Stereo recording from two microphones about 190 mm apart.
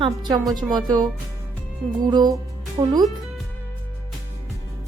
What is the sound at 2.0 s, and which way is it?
Speech, 20° right (ahead or behind).